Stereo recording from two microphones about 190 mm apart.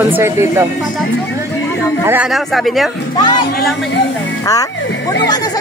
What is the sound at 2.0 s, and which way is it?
Speech, 10° right (ahead or behind).